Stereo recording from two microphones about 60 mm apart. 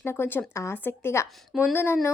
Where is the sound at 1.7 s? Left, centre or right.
Left.